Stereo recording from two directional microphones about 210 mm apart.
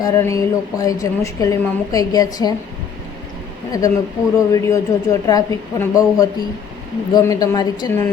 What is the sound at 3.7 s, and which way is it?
Speech, 15° left (ahead or behind).